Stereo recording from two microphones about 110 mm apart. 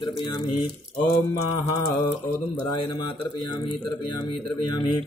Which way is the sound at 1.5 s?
30° left (ahead or behind).